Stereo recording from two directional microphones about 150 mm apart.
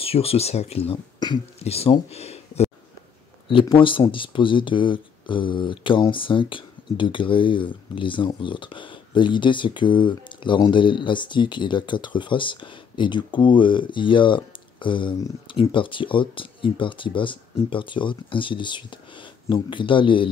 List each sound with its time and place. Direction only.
0.0 s speech: 40° left (ahead or behind)
1.2 s speech: 30° left (ahead or behind)
1.6 s speech: 40° left (ahead or behind)
3.7 s speech: 35° left (ahead or behind)